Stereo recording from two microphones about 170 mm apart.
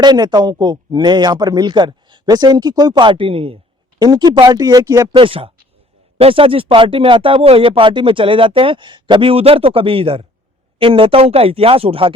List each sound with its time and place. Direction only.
0.0 s speech: 25° right (ahead or behind)